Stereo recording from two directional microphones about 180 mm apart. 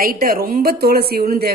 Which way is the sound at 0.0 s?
55° right (ahead or behind).